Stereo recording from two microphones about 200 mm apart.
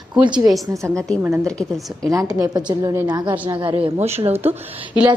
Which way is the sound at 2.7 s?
20° right (ahead or behind).